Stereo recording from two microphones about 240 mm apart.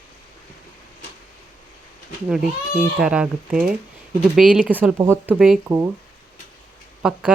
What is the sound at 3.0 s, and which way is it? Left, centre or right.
Speech, centre.